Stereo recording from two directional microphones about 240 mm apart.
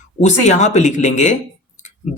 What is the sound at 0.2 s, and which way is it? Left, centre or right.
Speech, left.